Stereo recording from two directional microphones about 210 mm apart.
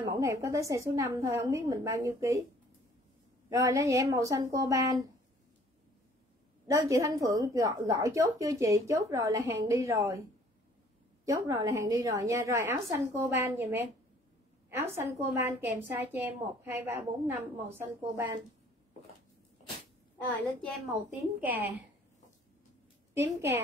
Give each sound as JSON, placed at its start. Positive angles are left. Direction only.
{"t": 0.1, "sound": "a woman's voice", "side_deg": -15}
{"t": 3.4, "sound": "a woman's voice", "side_deg": -15}
{"t": 6.7, "sound": "a woman's voice", "side_deg": -15}
{"t": 11.2, "sound": "a woman's voice", "side_deg": -15}
{"t": 20.9, "sound": "a woman's voice", "side_deg": -10}
{"t": 23.1, "sound": "a woman's voice", "side_deg": -10}